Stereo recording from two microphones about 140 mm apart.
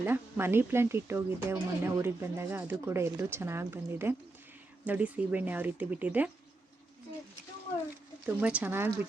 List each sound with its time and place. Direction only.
0.0 s speech: 15° right (ahead or behind)
8.4 s speech: 10° right (ahead or behind)